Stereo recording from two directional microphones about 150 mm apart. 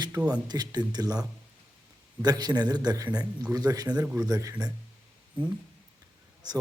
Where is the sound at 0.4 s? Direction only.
25° right (ahead or behind).